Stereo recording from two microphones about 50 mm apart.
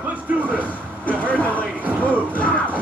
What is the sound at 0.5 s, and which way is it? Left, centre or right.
Speech, left.